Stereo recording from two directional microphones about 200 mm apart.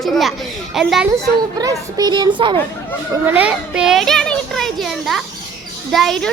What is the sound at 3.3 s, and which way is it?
A child's voice, 5° right (ahead or behind).